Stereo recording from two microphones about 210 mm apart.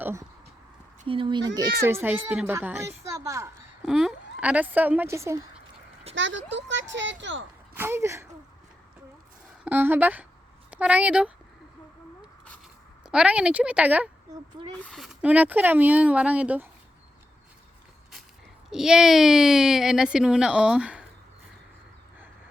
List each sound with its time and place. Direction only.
0.0 s a sound: 10° right (ahead or behind)
1.0 s speech: 25° right (ahead or behind)
3.8 s a woman's voice: centre (ahead or behind)
6.1 s speech: 60° right (ahead or behind)
7.7 s speech: 10° right (ahead or behind)
9.6 s a woman's voice: 10° right (ahead or behind)
13.1 s a woman's voice: 5° right (ahead or behind)
18.7 s a woman's voice: 5° right (ahead or behind)